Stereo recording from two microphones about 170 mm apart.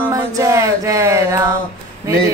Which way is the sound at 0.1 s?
20° right (ahead or behind).